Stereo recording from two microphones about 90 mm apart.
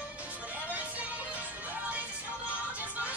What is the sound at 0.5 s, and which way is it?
Music, 15° right (ahead or behind).